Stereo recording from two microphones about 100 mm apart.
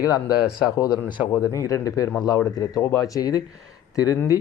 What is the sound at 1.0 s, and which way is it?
Speech, 15° right (ahead or behind).